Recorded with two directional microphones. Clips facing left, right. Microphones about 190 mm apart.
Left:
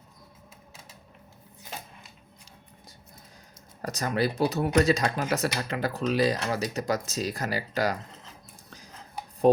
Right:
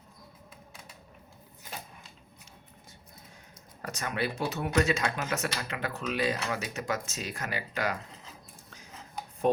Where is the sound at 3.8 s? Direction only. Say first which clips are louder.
Left 6 dB; 35° left (ahead or behind).